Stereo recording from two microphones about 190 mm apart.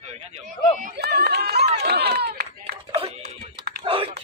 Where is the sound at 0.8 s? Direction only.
60° right (ahead or behind).